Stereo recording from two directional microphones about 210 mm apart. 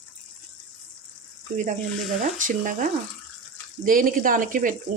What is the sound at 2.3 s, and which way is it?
Speech, 40° right (ahead or behind).